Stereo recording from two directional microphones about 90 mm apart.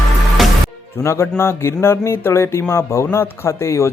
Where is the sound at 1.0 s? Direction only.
30° left (ahead or behind).